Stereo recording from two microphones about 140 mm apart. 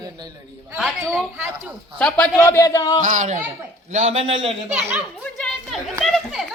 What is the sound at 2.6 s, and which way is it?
Speech, 25° left (ahead or behind).